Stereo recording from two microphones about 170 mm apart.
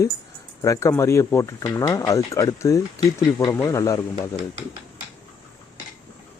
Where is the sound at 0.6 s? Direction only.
20° left (ahead or behind).